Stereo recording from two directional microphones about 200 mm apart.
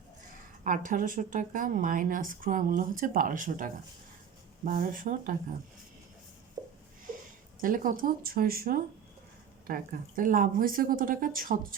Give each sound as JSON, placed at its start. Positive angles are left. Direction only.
{"t": 0.6, "sound": "a woman's voice", "side_deg": -40}
{"t": 6.6, "sound": "a sound", "side_deg": -20}
{"t": 7.6, "sound": "a woman's voice", "side_deg": -45}